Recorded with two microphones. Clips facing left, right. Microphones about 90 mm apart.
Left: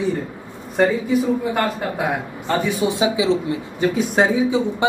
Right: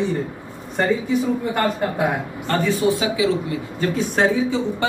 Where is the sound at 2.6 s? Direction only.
15° left (ahead or behind).